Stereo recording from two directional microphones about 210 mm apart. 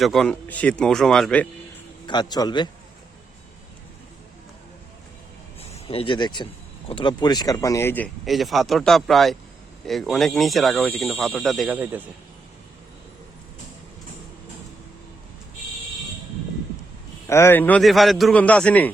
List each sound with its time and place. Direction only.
0.0 s speech: centre (ahead or behind)
2.0 s a man's voice: 20° left (ahead or behind)
5.5 s speech: 25° left (ahead or behind); by 12.0 s 10° right (ahead or behind)
17.2 s speech: 10° left (ahead or behind)